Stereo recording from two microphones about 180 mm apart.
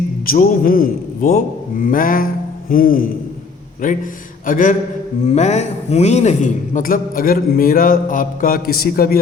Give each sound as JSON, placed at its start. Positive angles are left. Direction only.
{"t": 0.3, "sound": "a man's voice", "side_deg": 50}